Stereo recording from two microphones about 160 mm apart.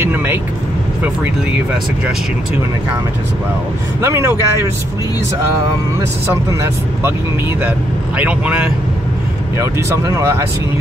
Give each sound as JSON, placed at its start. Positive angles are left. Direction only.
{"t": 0.0, "sound": "vehicle", "side_deg": -15}
{"t": 1.0, "sound": "speech", "side_deg": -10}
{"t": 4.0, "sound": "speech", "side_deg": -15}
{"t": 5.9, "sound": "speech", "side_deg": -20}
{"t": 8.2, "sound": "speech", "side_deg": -10}